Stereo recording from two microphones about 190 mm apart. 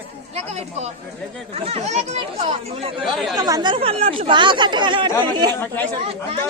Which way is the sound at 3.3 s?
20° right (ahead or behind).